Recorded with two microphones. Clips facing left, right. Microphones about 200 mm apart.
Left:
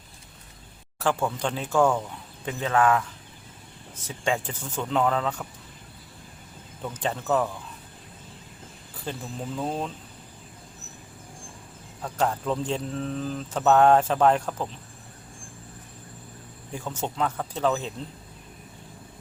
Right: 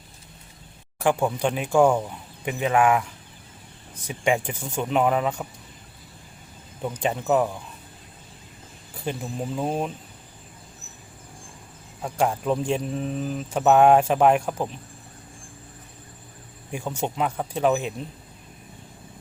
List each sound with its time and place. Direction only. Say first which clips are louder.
0.9 s speech: right 4 dB; 15° right (ahead or behind)
6.8 s speech: right 4 dB; 15° right (ahead or behind)
9.0 s speech: right 4 dB; 15° right (ahead or behind)
12.0 s speech: right 3 dB; 10° right (ahead or behind)
16.7 s speech: right 3 dB; 15° right (ahead or behind)